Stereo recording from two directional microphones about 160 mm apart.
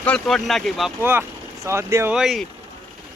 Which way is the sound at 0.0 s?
5° left (ahead or behind).